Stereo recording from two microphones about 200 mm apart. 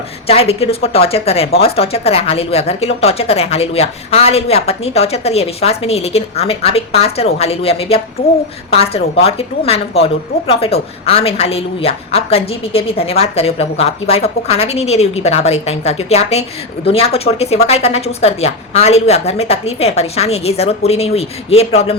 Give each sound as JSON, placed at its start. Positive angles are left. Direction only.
{"t": 0.3, "sound": "a woman's voice", "side_deg": 30}